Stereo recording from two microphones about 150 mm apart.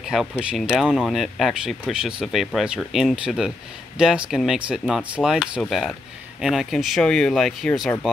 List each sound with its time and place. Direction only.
0.0 s speech: 5° right (ahead or behind)